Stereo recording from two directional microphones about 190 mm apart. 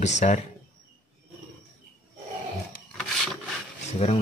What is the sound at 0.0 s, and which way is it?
Speech, 40° left (ahead or behind).